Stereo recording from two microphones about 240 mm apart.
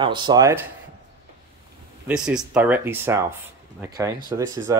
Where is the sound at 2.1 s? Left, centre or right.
Centre.